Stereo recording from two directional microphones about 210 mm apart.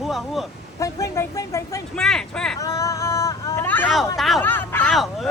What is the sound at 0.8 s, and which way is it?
Speech, 15° left (ahead or behind).